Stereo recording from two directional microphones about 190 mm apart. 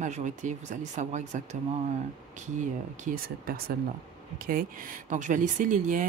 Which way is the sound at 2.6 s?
45° right (ahead or behind).